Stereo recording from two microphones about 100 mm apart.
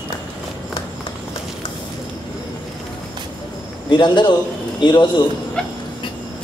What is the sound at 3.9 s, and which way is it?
A man's voice, 45° left (ahead or behind).